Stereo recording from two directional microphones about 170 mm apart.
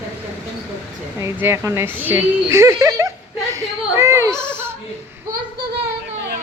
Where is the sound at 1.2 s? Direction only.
15° right (ahead or behind).